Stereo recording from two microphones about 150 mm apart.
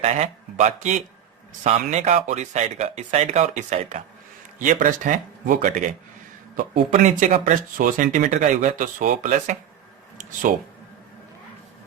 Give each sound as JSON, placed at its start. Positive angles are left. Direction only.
{"t": 0.0, "sound": "speech", "side_deg": -50}
{"t": 4.6, "sound": "speech", "side_deg": -65}